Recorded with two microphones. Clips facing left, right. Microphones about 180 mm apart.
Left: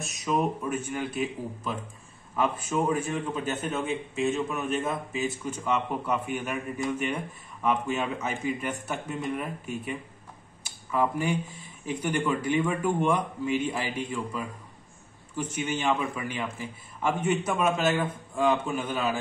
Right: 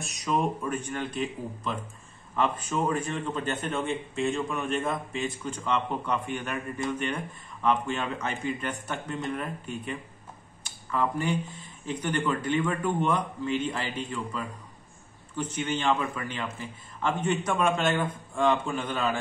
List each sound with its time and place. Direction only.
0.0 s a man's voice: centre (ahead or behind)